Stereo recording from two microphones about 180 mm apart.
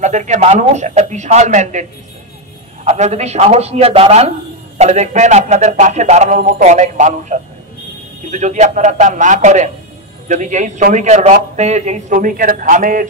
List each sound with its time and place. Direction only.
0.0 s a man's voice: 40° right (ahead or behind)